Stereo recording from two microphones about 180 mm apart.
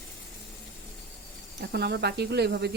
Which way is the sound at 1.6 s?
65° right (ahead or behind).